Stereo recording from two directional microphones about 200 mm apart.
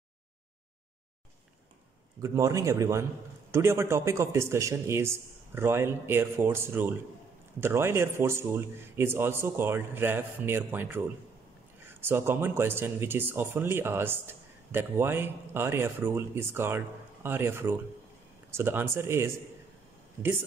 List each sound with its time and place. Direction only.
2.2 s speech: 15° right (ahead or behind)